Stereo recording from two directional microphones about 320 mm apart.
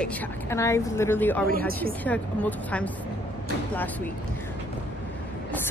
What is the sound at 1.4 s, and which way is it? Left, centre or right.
Speech, right.